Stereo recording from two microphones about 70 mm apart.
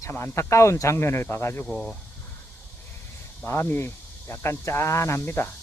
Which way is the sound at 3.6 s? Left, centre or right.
Left.